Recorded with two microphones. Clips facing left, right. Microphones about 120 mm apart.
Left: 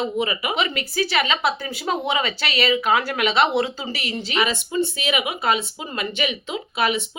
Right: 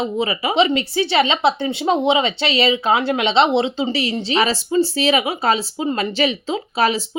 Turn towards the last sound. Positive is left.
turn(degrees=-35)  # may be behind; listen again after turning